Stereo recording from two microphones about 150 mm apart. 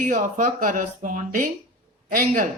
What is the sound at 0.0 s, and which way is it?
A man's voice, 60° right (ahead or behind).